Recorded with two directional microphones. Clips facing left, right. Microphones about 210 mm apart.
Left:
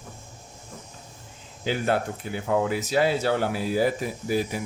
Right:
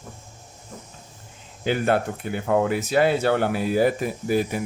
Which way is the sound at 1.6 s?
55° right (ahead or behind).